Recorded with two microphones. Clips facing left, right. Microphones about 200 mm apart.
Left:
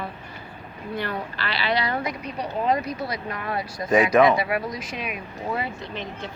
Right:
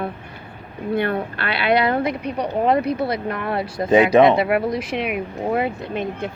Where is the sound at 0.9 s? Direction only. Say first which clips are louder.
Right 8 dB; 55° right (ahead or behind).